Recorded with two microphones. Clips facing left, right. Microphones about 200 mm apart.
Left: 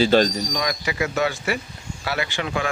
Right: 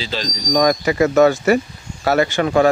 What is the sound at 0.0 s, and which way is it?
Speech, 55° left (ahead or behind).